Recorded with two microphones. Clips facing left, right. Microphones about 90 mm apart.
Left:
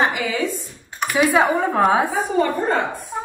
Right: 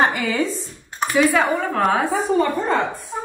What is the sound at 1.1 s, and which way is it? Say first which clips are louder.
Speech: left 1 dB; 20° left (ahead or behind).